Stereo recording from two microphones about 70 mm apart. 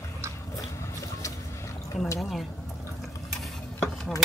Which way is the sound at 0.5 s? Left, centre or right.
Left.